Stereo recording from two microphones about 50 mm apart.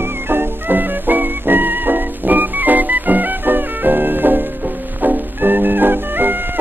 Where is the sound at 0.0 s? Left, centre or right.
Right.